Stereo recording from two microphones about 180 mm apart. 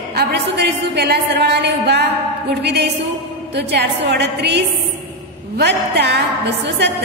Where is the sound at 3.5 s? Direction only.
70° right (ahead or behind).